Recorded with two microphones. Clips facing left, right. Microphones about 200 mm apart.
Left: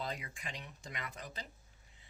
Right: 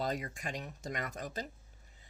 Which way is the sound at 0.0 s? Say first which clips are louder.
Right 6 dB; 45° right (ahead or behind).